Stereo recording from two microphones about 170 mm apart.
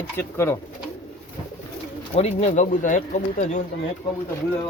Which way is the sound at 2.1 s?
40° left (ahead or behind).